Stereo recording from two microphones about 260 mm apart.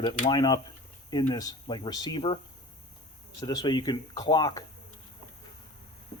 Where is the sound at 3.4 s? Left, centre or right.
Centre.